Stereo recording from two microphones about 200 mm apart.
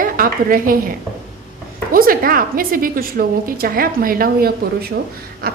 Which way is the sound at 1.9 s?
45° right (ahead or behind).